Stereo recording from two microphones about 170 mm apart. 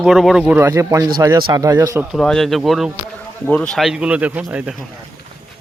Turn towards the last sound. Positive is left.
turn(degrees=-10)  # may be behind; listen again after turning